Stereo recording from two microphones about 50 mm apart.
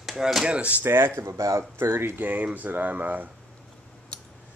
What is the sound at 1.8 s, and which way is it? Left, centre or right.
Speech, right.